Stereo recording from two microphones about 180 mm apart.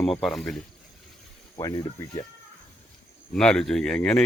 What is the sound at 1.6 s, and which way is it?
Speech, 20° left (ahead or behind).